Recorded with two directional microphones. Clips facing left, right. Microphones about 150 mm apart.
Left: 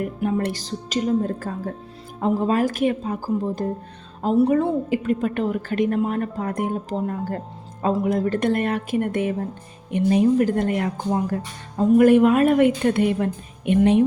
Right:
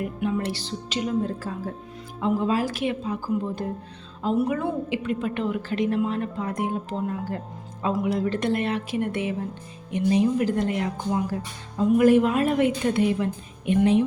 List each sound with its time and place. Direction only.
0.2 s a woman's voice: 45° left (ahead or behind); by 4.7 s 30° left (ahead or behind)
4.9 s a woman's voice: 45° left (ahead or behind); by 14.0 s 65° left (ahead or behind)